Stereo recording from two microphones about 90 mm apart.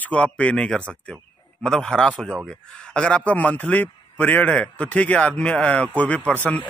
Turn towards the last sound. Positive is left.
turn(degrees=15)  # may be behind; listen again after turning